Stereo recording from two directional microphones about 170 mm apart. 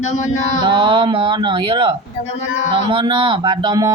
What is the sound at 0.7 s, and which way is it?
Speech, 30° right (ahead or behind).